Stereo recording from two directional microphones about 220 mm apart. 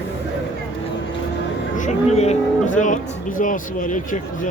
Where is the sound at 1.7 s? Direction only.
30° left (ahead or behind).